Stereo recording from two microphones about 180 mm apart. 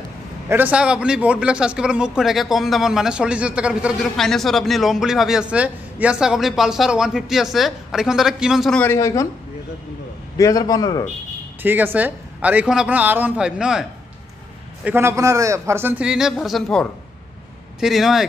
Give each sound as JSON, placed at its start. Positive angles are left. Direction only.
{"t": 0.5, "sound": "a man's voice", "side_deg": -10}
{"t": 10.3, "sound": "a man's voice", "side_deg": 20}
{"t": 11.6, "sound": "speech", "side_deg": -10}
{"t": 14.9, "sound": "speech", "side_deg": -15}
{"t": 17.7, "sound": "a man's voice", "side_deg": 0}